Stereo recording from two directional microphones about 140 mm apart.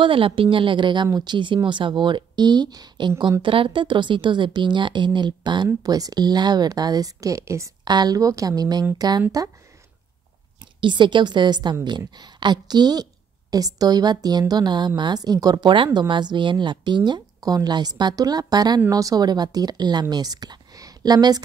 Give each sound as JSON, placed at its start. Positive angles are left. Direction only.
{"t": 0.0, "sound": "a woman's voice", "side_deg": -40}
{"t": 10.8, "sound": "a woman's voice", "side_deg": -35}